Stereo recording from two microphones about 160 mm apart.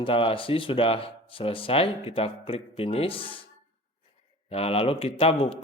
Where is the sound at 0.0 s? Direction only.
35° left (ahead or behind).